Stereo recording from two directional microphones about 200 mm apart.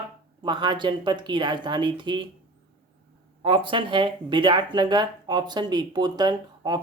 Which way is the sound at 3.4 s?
25° right (ahead or behind).